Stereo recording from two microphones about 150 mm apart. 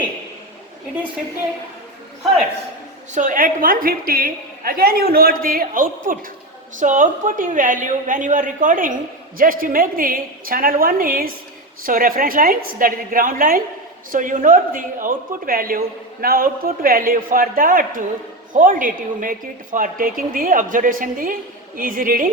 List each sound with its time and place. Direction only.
3.2 s a woman's voice: 65° right (ahead or behind)